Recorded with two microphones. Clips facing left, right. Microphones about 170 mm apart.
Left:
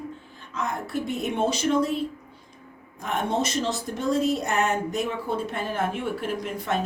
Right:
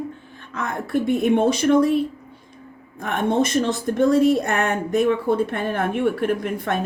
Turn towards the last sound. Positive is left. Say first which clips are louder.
# right 5 dB
turn(degrees=-55)  # may be behind; listen again after turning